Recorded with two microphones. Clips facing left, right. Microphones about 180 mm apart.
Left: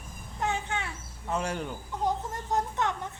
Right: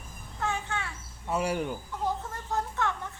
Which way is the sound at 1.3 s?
10° right (ahead or behind).